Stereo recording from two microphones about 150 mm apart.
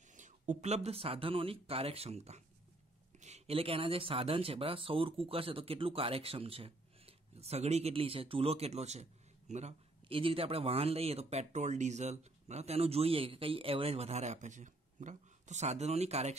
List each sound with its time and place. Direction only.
0.1 s speech: 55° right (ahead or behind)